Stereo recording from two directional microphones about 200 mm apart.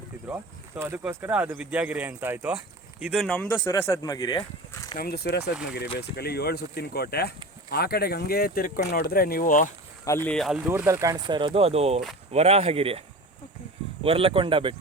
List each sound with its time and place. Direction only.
0.8 s speech: 10° right (ahead or behind); by 4.9 s 20° left (ahead or behind)
4.9 s speech: 50° left (ahead or behind)
10.0 s speech: 15° left (ahead or behind)
10.7 s speech: 10° right (ahead or behind); by 13.0 s 30° right (ahead or behind)
14.0 s speech: 25° right (ahead or behind)